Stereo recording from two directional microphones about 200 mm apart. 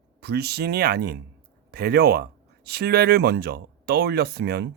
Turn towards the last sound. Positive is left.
turn(degrees=-55)  # may be behind; listen again after turning